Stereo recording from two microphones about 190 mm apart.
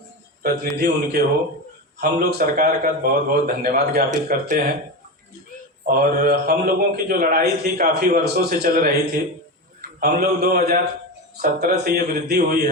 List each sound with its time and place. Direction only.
0.4 s a man's voice: 55° right (ahead or behind)
5.8 s a man's voice: 50° right (ahead or behind)
10.0 s a man's voice: 55° right (ahead or behind)